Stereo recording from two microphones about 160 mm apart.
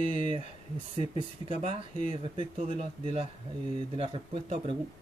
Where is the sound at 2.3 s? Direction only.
40° right (ahead or behind).